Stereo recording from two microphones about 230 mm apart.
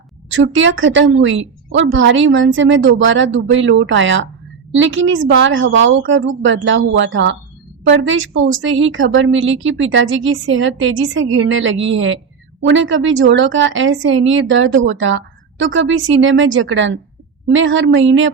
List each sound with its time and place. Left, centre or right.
0.3 s a woman's voice: right